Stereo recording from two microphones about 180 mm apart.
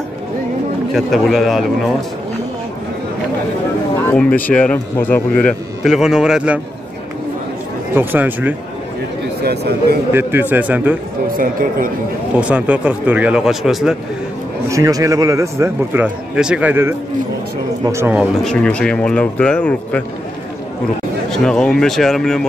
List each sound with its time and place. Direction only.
0.9 s speech: centre (ahead or behind)
4.1 s a man's voice: 10° left (ahead or behind)
7.9 s speech: 10° right (ahead or behind)
9.4 s speech: 65° right (ahead or behind)
10.1 s speech: 10° right (ahead or behind)
12.4 s speech: 5° right (ahead or behind)
14.7 s speech: 20° right (ahead or behind)
18.4 s speech: 5° left (ahead or behind)
21.3 s speech: 5° left (ahead or behind)